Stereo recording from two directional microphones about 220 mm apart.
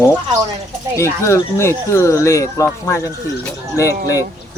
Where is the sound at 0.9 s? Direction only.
10° left (ahead or behind).